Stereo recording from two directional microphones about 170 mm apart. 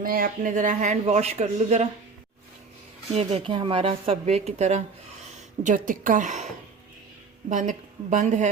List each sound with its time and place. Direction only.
0.0 s speech: 55° right (ahead or behind)
3.1 s speech: 35° right (ahead or behind)
5.6 s speech: 50° right (ahead or behind)
7.5 s speech: 45° right (ahead or behind)